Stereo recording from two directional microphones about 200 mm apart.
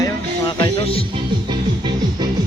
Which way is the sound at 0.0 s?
20° left (ahead or behind).